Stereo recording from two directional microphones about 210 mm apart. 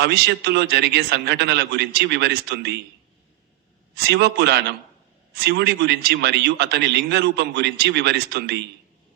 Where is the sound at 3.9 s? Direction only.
50° right (ahead or behind).